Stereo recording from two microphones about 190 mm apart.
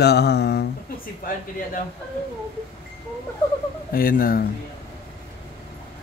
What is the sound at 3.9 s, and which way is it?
Speech, 50° left (ahead or behind).